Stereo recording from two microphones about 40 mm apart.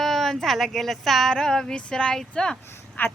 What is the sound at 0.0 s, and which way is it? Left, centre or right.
A woman's voice, centre.